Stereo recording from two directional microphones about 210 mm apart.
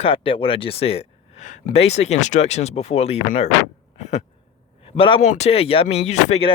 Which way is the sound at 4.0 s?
35° left (ahead or behind).